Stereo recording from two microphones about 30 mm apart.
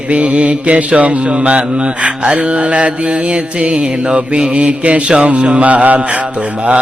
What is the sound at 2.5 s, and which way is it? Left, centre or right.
Speech, right.